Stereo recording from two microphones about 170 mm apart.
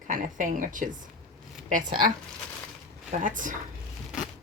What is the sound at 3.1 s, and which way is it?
Speech, 50° right (ahead or behind).